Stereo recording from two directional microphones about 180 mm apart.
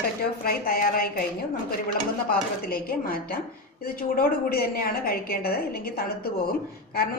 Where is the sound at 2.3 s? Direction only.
55° left (ahead or behind).